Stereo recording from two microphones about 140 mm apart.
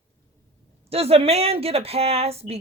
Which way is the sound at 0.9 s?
45° right (ahead or behind).